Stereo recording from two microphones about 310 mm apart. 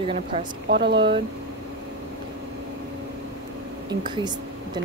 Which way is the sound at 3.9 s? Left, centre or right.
Centre.